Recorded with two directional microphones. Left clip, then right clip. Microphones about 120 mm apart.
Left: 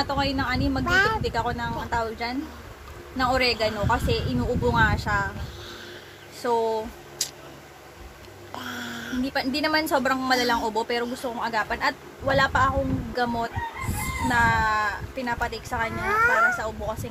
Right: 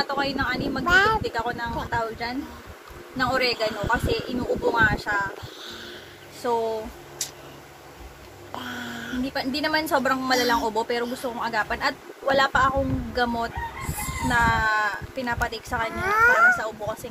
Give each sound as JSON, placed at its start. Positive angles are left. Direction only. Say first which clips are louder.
{"t": 0.0, "sound": "a woman's voice", "louder": "even", "side_deg": 10}
{"t": 0.8, "sound": "speech", "louder": "right 3 dB", "side_deg": -35}
{"t": 1.2, "sound": "a woman's voice", "louder": "left 1 dB", "side_deg": 10}
{"t": 6.4, "sound": "speech", "louder": "left 1 dB", "side_deg": 30}
{"t": 8.5, "sound": "speech", "louder": "even", "side_deg": -10}
{"t": 9.3, "sound": "a woman's voice", "louder": "left 1 dB", "side_deg": 15}
{"t": 11.8, "sound": "a woman's voice", "louder": "even", "side_deg": -5}
{"t": 16.0, "sound": "speech", "louder": "right 3 dB", "side_deg": -90}
{"t": 16.5, "sound": "speech", "louder": "right 1 dB", "side_deg": -10}